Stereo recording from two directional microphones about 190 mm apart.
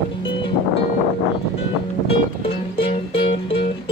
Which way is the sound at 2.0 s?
30° left (ahead or behind).